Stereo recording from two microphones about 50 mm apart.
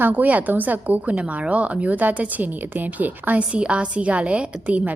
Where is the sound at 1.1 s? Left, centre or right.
Right.